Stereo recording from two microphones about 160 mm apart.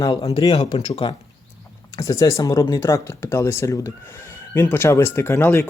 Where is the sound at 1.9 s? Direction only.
20° left (ahead or behind).